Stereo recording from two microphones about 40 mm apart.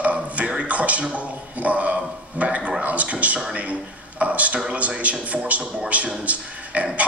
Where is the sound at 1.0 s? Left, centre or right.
Right.